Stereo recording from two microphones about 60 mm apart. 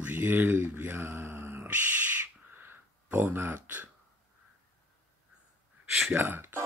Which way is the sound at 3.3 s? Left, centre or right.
Right.